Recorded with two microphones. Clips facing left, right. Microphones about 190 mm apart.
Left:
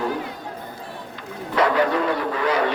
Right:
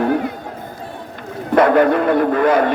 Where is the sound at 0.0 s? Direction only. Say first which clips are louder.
Right 8 dB; 60° right (ahead or behind).